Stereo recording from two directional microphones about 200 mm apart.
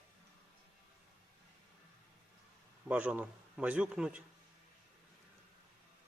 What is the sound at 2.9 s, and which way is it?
A man's voice, 5° right (ahead or behind).